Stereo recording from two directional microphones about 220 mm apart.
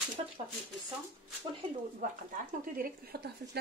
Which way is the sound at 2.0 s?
40° right (ahead or behind).